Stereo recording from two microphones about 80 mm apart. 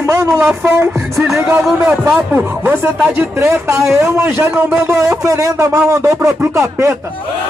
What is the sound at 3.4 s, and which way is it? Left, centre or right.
A man's voice, right.